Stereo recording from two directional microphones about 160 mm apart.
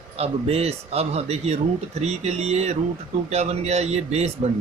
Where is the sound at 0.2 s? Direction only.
40° right (ahead or behind).